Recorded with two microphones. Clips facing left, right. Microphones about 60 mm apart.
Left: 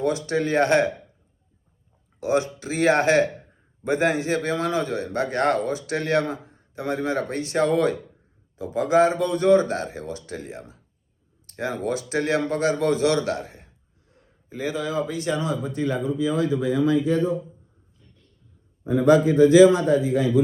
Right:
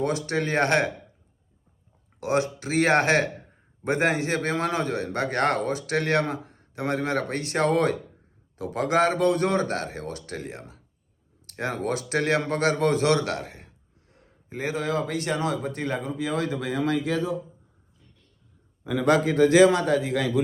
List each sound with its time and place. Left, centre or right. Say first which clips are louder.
0.0 s a man's voice: left 2 dB; right
2.6 s a man's voice: right 1 dB; right
14.1 s a sound: right 1 dB; right
14.9 s speech: left 2 dB; right
18.9 s a man's voice: left 4 dB; right